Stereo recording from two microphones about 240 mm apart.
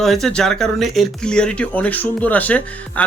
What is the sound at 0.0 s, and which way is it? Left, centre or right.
Speech, centre.